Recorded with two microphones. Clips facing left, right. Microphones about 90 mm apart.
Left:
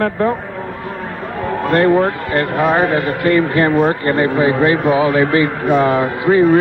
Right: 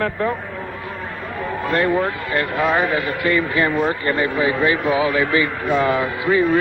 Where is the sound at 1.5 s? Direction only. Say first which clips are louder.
Left 6 dB; 55° left (ahead or behind).